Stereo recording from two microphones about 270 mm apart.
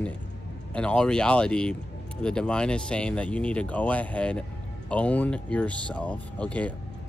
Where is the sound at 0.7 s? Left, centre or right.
Centre.